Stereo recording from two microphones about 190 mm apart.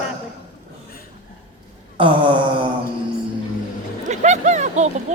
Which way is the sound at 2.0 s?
25° right (ahead or behind).